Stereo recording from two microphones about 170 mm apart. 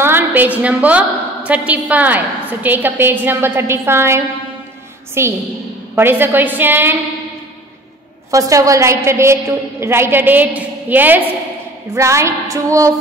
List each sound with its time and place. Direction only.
0.0 s a woman's voice: 10° right (ahead or behind)
8.3 s a woman's voice: 20° right (ahead or behind)